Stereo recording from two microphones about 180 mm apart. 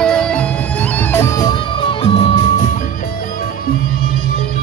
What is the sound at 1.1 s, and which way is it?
Music, 20° left (ahead or behind).